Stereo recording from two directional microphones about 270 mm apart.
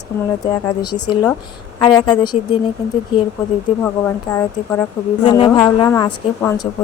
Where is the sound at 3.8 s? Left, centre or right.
Centre.